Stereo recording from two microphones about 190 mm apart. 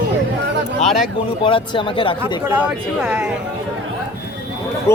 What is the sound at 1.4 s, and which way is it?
Speech, 25° left (ahead or behind).